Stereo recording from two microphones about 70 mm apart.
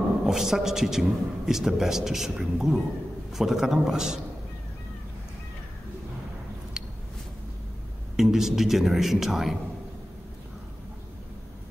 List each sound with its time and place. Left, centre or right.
0.2 s a man's voice: centre
6.8 s a sound: centre
8.2 s a man's voice: centre